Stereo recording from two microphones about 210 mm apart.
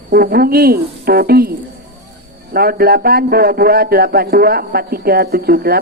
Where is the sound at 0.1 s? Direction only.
45° right (ahead or behind).